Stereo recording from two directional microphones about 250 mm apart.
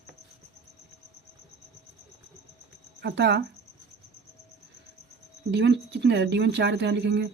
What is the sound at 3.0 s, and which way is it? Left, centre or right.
Speech, right.